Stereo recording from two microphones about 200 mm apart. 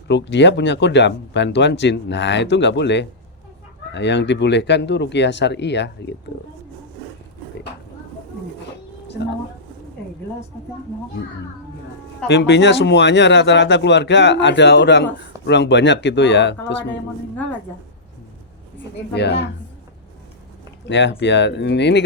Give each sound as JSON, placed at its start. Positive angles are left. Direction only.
{"t": 0.1, "sound": "speech", "side_deg": 60}
{"t": 12.3, "sound": "speech", "side_deg": 60}
{"t": 19.1, "sound": "speech", "side_deg": 55}
{"t": 20.8, "sound": "speech", "side_deg": 60}